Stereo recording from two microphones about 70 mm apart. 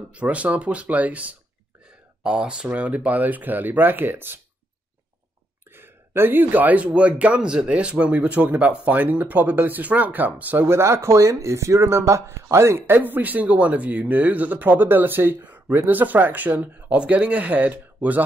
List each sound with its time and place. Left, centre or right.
0.1 s speech: centre
5.7 s speech: right
10.7 s speech: right